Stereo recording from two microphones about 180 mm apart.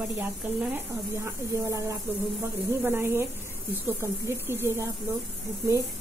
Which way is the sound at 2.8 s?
15° right (ahead or behind).